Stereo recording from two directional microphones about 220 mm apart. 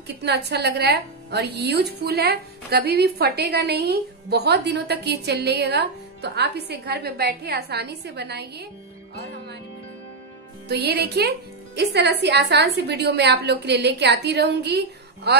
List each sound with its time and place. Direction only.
0.2 s a woman's voice: 50° right (ahead or behind)
10.7 s a woman's voice: 50° right (ahead or behind)